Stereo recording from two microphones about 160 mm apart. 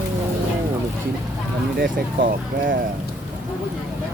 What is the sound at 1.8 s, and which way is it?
Speech, 60° right (ahead or behind).